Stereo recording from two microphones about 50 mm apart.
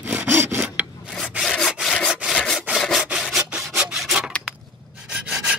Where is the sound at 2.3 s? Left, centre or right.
Centre.